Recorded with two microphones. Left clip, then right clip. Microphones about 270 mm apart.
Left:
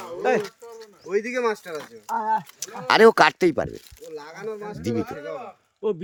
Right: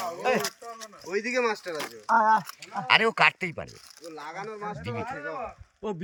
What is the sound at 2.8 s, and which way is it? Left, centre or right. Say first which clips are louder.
Speech: left 6 dB; left.